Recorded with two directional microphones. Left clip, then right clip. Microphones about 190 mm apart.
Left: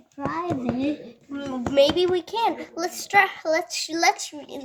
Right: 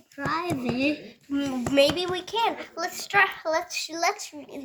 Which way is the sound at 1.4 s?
35° left (ahead or behind).